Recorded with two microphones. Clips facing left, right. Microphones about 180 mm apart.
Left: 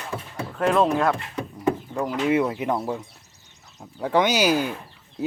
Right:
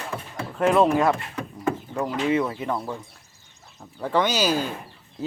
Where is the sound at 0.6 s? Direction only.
5° right (ahead or behind).